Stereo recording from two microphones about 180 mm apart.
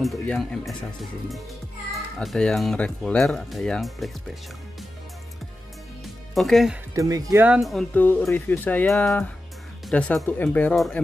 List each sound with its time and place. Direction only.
0.0 s speech: centre (ahead or behind)
2.1 s speech: 5° left (ahead or behind)
6.0 s music: centre (ahead or behind)
6.9 s speech: 20° right (ahead or behind)
7.4 s speech: 5° right (ahead or behind)